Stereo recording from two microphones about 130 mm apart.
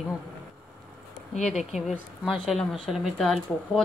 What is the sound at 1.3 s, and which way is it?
Speech, 65° left (ahead or behind).